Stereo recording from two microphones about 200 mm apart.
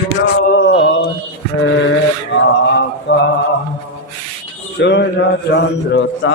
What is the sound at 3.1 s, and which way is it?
Mantra, 65° left (ahead or behind).